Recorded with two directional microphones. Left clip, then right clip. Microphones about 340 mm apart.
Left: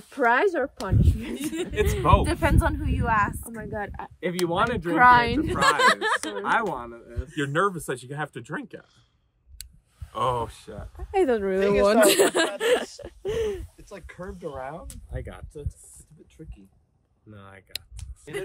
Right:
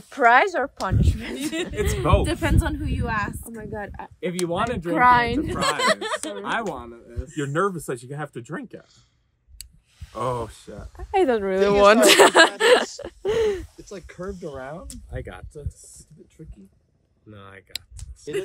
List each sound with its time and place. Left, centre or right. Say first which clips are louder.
0.1 s a woman's voice: right 5 dB; centre
1.5 s a woman's voice: left 1 dB; centre
4.3 s speech: left 1 dB; centre
4.9 s a woman's voice: even; centre
10.1 s speech: left 1 dB; centre
11.1 s a woman's voice: right 2 dB; centre; by 13.7 s right
13.8 s speech: right 3 dB; left
15.0 s a woman's voice: right 5 dB; centre
16.4 s speech: left 1 dB; left
17.3 s a woman's voice: right 2 dB; centre